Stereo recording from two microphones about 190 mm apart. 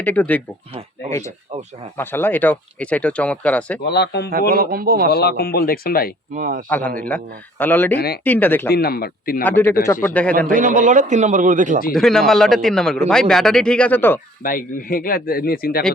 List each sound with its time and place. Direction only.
0.0 s speech: 10° left (ahead or behind)
2.0 s speech: 10° left (ahead or behind)
3.8 s a man's voice: 65° left (ahead or behind)
4.3 s a man's voice: 50° right (ahead or behind)
5.1 s speech: 55° left (ahead or behind)
6.3 s a man's voice: 45° right (ahead or behind)
6.7 s speech: 10° left (ahead or behind)
7.9 s a man's voice: 55° left (ahead or behind)
8.2 s speech: 10° left (ahead or behind)
8.7 s a man's voice: 55° left (ahead or behind)
9.4 s speech: 10° left (ahead or behind)
10.3 s speech: 45° right (ahead or behind)
11.9 s a man's voice: centre (ahead or behind)
14.4 s speech: 50° left (ahead or behind)